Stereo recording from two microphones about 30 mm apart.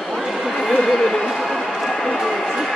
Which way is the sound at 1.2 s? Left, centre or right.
Centre.